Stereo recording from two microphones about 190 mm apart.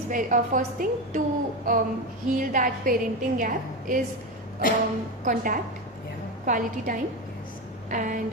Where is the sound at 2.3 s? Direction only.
45° right (ahead or behind).